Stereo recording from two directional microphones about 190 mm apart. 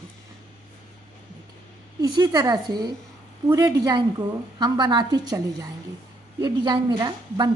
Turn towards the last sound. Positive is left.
turn(degrees=-20)  # may be behind; listen again after turning